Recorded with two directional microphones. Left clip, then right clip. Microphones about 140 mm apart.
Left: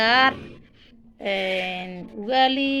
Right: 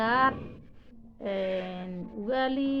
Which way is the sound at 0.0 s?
25° left (ahead or behind).